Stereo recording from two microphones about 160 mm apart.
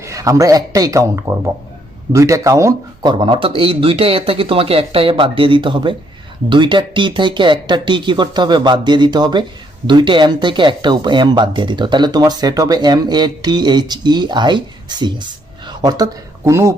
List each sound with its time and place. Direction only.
0.0 s speech: 20° right (ahead or behind)